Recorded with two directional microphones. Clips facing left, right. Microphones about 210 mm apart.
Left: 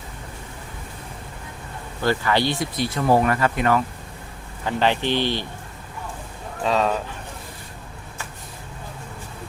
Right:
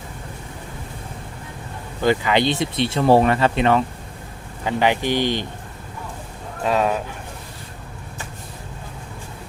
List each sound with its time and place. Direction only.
2.0 s speech: 15° right (ahead or behind)
4.6 s speech: 15° right (ahead or behind)
6.6 s speech: 10° right (ahead or behind)